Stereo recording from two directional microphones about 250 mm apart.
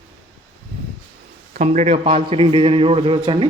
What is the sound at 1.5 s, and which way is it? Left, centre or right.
Speech, right.